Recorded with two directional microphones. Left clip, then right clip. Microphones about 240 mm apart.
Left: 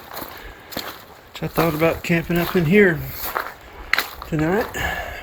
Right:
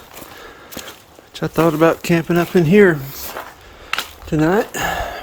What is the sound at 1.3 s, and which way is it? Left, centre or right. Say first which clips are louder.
Speech: right 5 dB; right.